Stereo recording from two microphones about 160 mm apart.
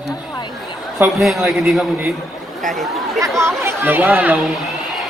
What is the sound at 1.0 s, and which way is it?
A man's voice, centre (ahead or behind).